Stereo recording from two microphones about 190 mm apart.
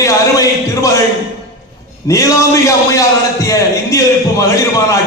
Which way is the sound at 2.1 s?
15° left (ahead or behind).